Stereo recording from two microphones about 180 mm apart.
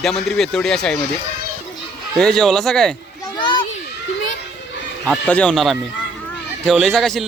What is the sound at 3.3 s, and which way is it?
Children playing, 25° left (ahead or behind).